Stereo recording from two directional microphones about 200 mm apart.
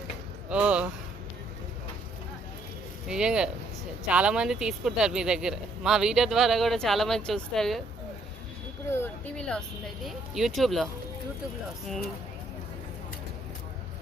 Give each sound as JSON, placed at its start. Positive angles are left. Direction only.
{"t": 0.5, "sound": "speech", "side_deg": -5}
{"t": 3.1, "sound": "speech", "side_deg": -5}
{"t": 9.3, "sound": "speech", "side_deg": 5}